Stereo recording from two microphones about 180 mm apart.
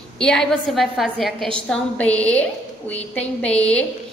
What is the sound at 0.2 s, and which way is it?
A woman's voice, 5° left (ahead or behind).